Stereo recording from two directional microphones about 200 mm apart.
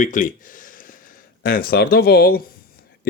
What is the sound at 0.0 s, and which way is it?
Speech, 40° left (ahead or behind).